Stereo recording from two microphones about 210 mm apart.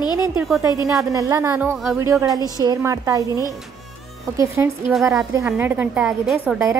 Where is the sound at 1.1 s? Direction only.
15° right (ahead or behind).